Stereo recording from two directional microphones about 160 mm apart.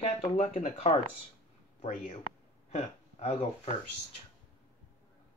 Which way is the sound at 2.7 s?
45° left (ahead or behind).